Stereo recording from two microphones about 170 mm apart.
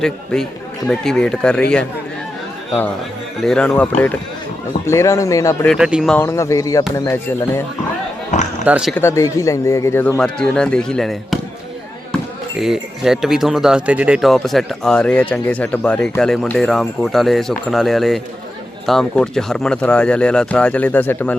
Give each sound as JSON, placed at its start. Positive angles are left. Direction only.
{"t": 0.0, "sound": "speech", "side_deg": 5}
{"t": 3.4, "sound": "speech", "side_deg": 5}
{"t": 5.6, "sound": "speech", "side_deg": -5}
{"t": 6.1, "sound": "speech", "side_deg": 15}
{"t": 8.6, "sound": "speech", "side_deg": -5}
{"t": 9.0, "sound": "speech", "side_deg": 15}
{"t": 12.5, "sound": "speech", "side_deg": 0}